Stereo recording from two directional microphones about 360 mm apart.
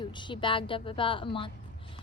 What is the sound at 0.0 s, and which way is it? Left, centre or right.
Speech, centre.